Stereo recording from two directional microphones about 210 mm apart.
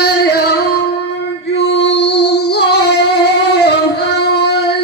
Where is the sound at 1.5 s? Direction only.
60° left (ahead or behind).